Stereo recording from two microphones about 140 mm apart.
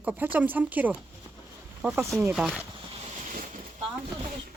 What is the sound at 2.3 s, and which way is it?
Speech, 5° right (ahead or behind).